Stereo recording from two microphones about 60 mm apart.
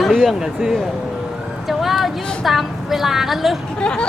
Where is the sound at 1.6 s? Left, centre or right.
Centre.